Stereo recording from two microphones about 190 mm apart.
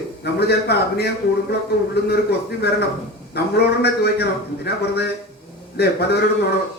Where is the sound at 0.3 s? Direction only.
60° left (ahead or behind).